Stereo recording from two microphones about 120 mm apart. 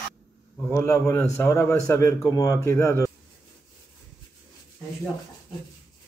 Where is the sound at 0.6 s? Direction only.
25° left (ahead or behind).